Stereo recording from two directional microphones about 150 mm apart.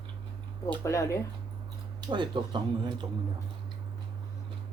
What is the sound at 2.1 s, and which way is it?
Speech, 30° right (ahead or behind).